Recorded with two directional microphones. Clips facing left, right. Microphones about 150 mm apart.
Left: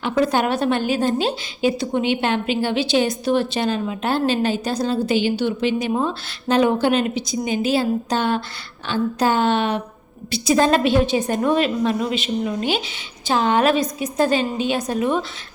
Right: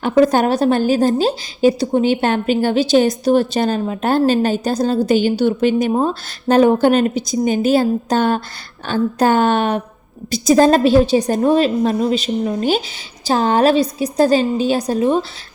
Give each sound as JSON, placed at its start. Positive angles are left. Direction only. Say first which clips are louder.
{"t": 0.0, "sound": "a woman's voice", "louder": "right 6 dB", "side_deg": -45}